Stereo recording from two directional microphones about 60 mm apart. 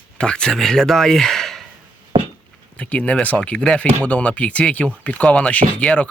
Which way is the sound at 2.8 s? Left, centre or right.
Left.